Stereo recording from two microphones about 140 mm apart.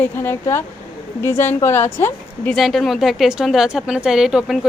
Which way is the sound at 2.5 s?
Centre (ahead or behind).